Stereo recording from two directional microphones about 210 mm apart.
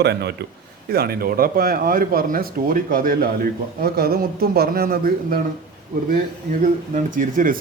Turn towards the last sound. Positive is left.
turn(degrees=-40)  # may be behind; listen again after turning